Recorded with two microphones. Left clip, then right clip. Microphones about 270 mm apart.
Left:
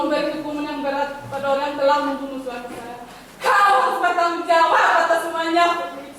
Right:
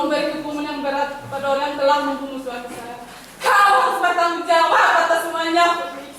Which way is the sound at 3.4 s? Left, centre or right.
Centre.